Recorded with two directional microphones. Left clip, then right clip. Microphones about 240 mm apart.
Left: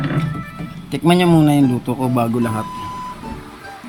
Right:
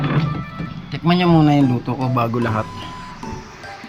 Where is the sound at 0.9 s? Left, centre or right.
Left.